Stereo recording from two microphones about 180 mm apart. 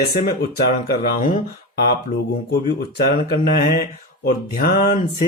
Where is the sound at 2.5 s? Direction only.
65° left (ahead or behind).